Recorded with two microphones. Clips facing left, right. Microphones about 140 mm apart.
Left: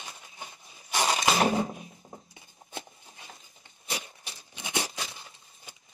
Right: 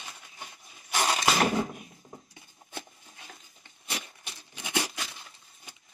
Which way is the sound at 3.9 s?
40° left (ahead or behind).